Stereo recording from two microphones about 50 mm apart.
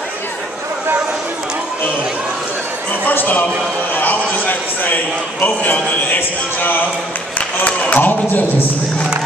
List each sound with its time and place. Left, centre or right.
3.1 s a man's voice: left
7.3 s speech: left